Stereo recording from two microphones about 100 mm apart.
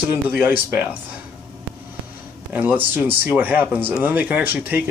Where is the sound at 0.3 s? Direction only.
15° right (ahead or behind).